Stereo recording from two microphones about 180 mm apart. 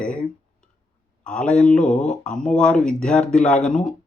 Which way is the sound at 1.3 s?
5° left (ahead or behind).